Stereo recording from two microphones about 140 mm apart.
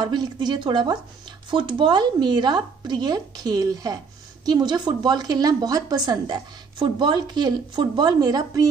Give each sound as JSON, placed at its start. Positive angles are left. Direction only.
{"t": 0.0, "sound": "a woman's voice", "side_deg": -30}